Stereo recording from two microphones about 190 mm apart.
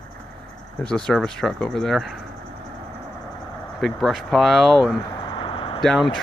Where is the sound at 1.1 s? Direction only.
5° left (ahead or behind).